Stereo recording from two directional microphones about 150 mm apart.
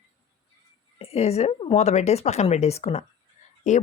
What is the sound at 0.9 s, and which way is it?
Speech, 40° left (ahead or behind).